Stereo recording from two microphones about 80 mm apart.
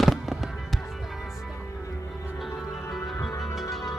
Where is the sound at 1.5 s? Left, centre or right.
Left.